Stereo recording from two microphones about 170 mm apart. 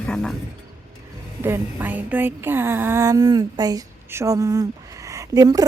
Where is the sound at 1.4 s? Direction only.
10° right (ahead or behind).